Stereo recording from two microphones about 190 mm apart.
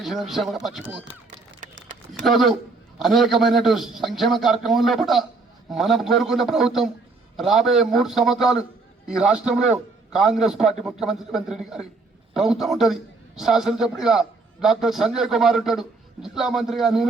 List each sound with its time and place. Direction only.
0.0 s a man's voice: centre (ahead or behind)
1.6 s a sound: 45° right (ahead or behind)
2.2 s a man's voice: centre (ahead or behind)